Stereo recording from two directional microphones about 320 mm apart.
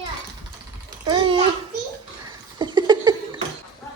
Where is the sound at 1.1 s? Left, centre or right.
Centre.